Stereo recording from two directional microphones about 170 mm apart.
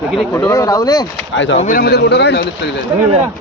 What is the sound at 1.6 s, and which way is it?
Speech, 55° left (ahead or behind).